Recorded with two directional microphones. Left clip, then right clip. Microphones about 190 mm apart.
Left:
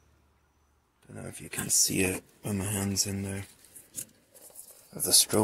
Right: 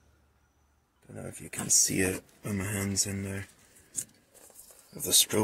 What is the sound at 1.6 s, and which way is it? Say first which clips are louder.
Speech: right 1 dB; 20° left (ahead or behind).